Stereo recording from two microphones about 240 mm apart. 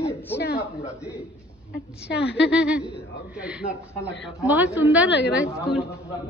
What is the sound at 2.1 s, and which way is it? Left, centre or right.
Speech, left.